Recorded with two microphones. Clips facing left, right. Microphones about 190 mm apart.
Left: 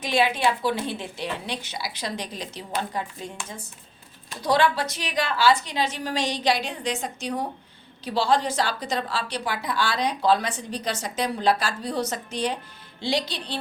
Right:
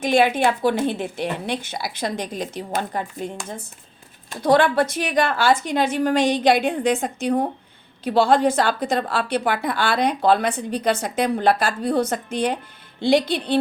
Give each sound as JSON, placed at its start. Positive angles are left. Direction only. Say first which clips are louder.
{"t": 0.0, "sound": "a woman's voice", "louder": "right 5 dB", "side_deg": -50}